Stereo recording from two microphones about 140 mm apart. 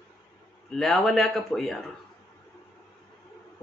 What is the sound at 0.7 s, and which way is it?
Speech, centre (ahead or behind).